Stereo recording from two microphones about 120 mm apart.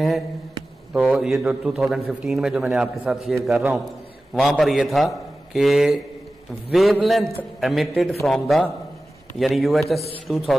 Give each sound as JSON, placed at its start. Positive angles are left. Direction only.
{"t": 1.0, "sound": "a man's voice", "side_deg": 0}